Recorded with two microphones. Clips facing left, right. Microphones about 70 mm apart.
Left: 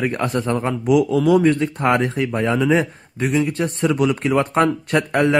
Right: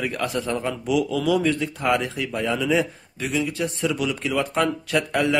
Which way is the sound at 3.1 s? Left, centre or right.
Left.